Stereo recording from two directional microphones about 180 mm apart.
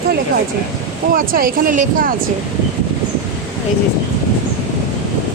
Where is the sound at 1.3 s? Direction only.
50° right (ahead or behind).